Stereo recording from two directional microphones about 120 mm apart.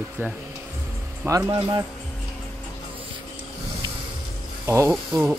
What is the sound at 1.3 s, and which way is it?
Speech, 25° right (ahead or behind).